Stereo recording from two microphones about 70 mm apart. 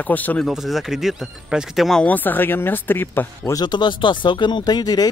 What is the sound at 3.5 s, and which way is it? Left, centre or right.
Speech, left.